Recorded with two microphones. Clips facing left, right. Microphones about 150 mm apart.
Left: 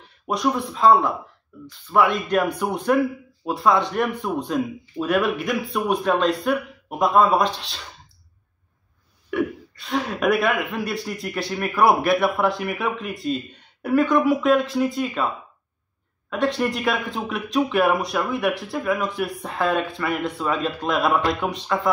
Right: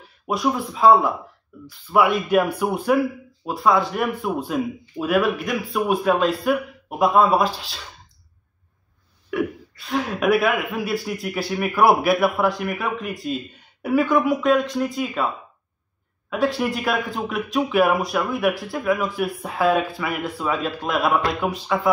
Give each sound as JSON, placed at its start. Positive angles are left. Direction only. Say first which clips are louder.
{"t": 0.0, "sound": "speech", "louder": "even", "side_deg": -5}
{"t": 9.3, "sound": "speech", "louder": "even", "side_deg": 0}
{"t": 16.3, "sound": "speech", "louder": "right 1 dB", "side_deg": -5}